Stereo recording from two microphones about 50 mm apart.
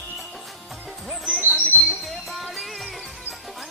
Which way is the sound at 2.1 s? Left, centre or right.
Centre.